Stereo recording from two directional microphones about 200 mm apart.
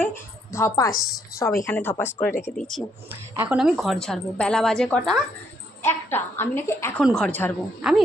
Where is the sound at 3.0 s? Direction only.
10° right (ahead or behind).